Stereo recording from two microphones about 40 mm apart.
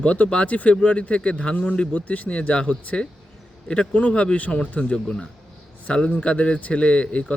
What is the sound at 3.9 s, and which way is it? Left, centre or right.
A man's voice, left.